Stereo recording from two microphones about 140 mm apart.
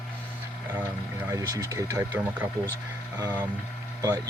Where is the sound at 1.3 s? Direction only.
25° right (ahead or behind).